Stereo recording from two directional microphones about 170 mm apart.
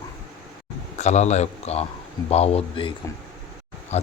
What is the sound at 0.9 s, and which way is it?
A man's voice, 40° left (ahead or behind).